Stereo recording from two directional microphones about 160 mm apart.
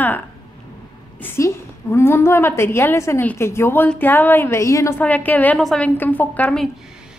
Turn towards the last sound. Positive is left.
turn(degrees=10)  # may be behind; listen again after turning